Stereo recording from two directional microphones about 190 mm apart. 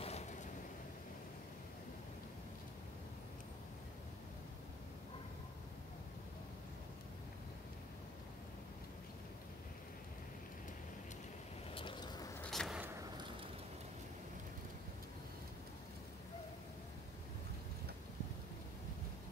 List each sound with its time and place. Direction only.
0.0 s vehicle: 35° left (ahead or behind)
11.7 s a sound: 25° left (ahead or behind)
12.4 s vehicle: centre (ahead or behind)